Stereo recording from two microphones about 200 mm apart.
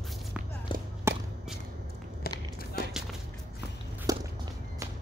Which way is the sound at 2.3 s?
50° left (ahead or behind).